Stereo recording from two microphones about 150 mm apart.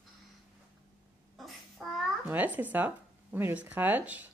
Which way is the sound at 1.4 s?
Centre (ahead or behind).